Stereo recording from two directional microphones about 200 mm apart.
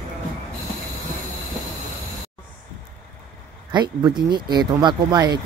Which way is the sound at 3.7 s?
20° right (ahead or behind).